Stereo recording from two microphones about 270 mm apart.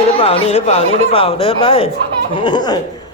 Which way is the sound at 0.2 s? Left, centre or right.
Left.